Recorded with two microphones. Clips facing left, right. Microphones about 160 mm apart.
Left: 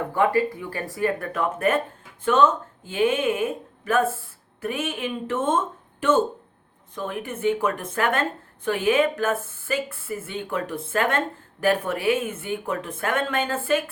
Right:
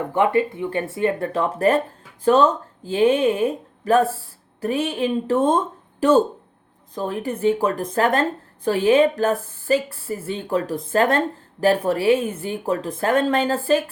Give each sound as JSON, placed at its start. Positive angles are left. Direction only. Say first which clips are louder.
{"t": 0.1, "sound": "a woman's voice", "louder": "right 3 dB", "side_deg": -20}